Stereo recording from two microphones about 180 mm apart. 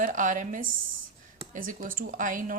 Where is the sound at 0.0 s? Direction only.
45° right (ahead or behind).